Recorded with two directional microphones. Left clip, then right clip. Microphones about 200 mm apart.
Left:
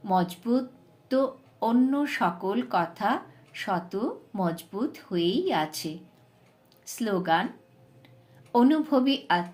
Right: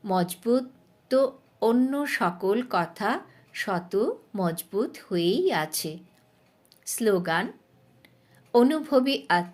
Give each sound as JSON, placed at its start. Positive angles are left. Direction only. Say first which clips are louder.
{"t": 0.0, "sound": "speech", "louder": "even", "side_deg": -45}
{"t": 8.5, "sound": "speech", "louder": "right 2 dB", "side_deg": -45}